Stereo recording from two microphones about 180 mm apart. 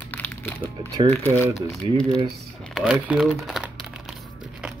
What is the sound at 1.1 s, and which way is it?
Speech, 10° left (ahead or behind).